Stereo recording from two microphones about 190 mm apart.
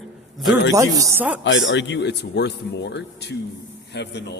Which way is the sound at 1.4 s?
75° left (ahead or behind).